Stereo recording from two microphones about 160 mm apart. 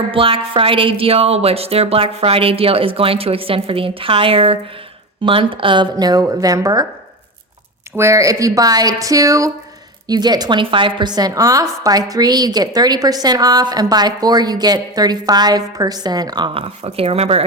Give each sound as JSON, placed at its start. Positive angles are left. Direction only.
{"t": 0.1, "sound": "a woman's voice", "side_deg": -35}
{"t": 7.9, "sound": "a woman's voice", "side_deg": -20}